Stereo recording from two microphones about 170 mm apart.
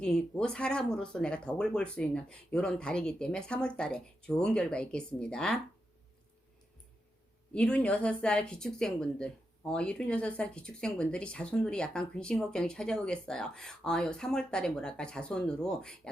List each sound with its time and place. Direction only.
0.0 s a woman's voice: 5° left (ahead or behind)
7.5 s a woman's voice: 5° left (ahead or behind)